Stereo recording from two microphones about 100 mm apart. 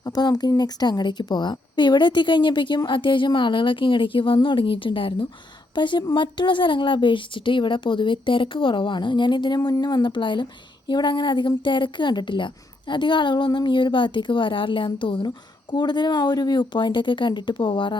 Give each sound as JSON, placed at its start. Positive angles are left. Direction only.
{"t": 0.0, "sound": "a woman's voice", "side_deg": 40}
{"t": 5.7, "sound": "a woman's voice", "side_deg": 50}